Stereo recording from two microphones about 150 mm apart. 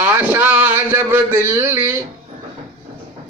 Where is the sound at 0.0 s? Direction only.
15° right (ahead or behind).